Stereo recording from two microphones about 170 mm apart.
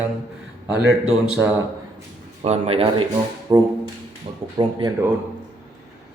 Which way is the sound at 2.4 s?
35° right (ahead or behind).